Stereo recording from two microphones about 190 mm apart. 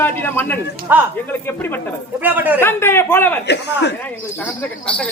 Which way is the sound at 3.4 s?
65° left (ahead or behind).